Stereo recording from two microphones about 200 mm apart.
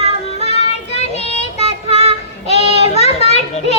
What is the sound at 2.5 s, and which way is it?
Children playing, 30° left (ahead or behind).